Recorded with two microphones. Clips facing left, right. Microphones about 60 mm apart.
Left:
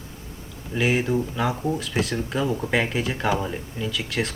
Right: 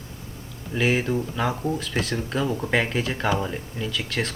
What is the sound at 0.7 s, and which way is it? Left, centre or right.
Speech, centre.